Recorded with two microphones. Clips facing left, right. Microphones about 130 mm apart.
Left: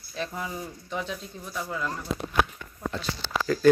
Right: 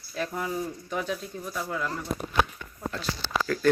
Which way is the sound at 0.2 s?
5° right (ahead or behind).